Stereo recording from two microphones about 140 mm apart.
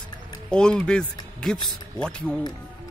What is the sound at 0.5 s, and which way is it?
Speech, 5° left (ahead or behind).